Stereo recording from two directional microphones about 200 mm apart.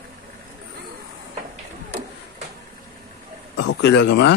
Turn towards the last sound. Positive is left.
turn(degrees=60)  # may be behind; listen again after turning